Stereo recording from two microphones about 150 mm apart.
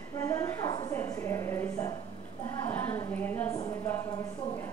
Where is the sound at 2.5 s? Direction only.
15° left (ahead or behind).